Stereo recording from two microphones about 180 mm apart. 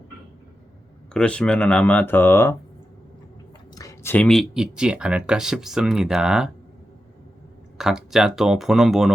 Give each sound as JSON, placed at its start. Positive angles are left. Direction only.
{"t": 1.1, "sound": "speech", "side_deg": 5}
{"t": 3.8, "sound": "speech", "side_deg": 15}
{"t": 7.8, "sound": "speech", "side_deg": 0}